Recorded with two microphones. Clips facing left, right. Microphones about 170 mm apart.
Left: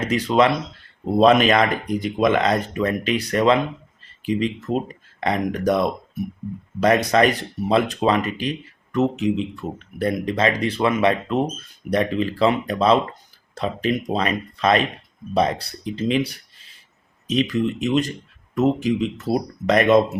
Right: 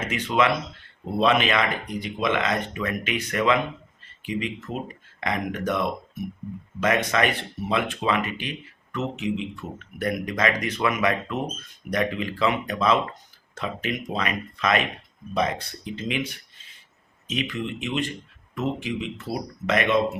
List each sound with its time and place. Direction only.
0.0 s speech: 35° left (ahead or behind)